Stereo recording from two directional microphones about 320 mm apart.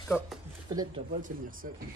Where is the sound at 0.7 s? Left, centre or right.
Centre.